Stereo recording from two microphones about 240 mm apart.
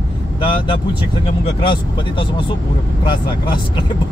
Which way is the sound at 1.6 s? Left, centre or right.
Left.